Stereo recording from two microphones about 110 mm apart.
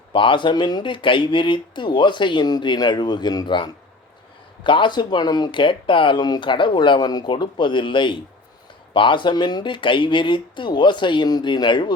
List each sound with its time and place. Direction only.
0.1 s speech: 50° left (ahead or behind)